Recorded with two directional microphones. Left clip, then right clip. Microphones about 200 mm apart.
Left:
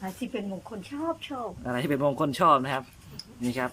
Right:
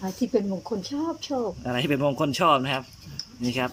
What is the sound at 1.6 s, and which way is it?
Speech, 5° right (ahead or behind).